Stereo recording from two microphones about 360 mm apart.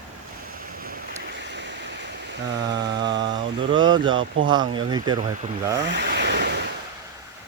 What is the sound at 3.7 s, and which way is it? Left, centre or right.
Speech, centre.